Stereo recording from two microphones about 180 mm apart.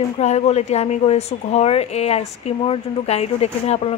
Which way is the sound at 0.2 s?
35° left (ahead or behind).